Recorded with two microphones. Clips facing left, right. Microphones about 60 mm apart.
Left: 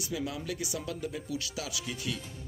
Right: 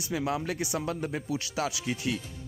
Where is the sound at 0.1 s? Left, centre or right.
Right.